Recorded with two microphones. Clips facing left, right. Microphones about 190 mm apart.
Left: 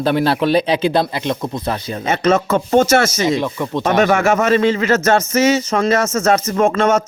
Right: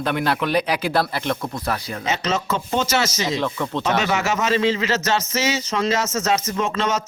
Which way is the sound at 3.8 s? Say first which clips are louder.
Left 8 dB; 50° left (ahead or behind).